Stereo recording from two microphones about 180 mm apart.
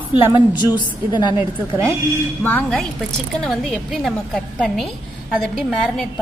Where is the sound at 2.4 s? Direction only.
10° left (ahead or behind).